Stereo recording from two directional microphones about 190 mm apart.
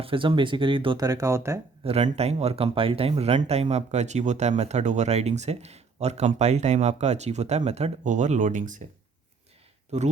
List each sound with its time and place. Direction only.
0.0 s speech: 25° right (ahead or behind)
1.8 s speech: 30° right (ahead or behind)
9.9 s speech: 35° right (ahead or behind)